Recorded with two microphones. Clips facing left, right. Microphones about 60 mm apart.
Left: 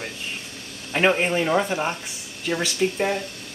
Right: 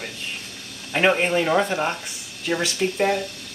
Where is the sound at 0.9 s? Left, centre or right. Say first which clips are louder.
Right 1 dB; centre.